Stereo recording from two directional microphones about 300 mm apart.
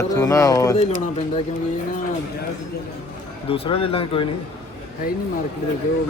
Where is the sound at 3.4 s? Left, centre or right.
Centre.